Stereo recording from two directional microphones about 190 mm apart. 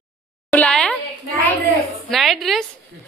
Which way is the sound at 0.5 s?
5° left (ahead or behind).